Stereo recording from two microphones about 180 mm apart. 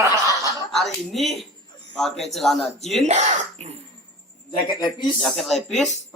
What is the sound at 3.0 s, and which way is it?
Speech, 40° right (ahead or behind).